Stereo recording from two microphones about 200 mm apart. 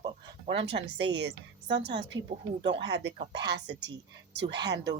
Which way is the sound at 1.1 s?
60° right (ahead or behind).